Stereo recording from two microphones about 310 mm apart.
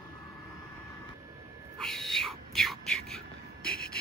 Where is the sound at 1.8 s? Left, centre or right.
Centre.